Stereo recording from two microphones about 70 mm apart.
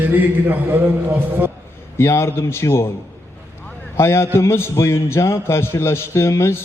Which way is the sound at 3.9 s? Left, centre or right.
Left.